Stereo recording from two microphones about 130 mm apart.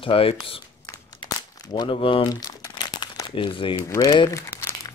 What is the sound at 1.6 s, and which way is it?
Crumpling, 35° left (ahead or behind).